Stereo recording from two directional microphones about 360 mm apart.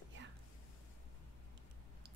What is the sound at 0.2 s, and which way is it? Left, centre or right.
Whispering, right.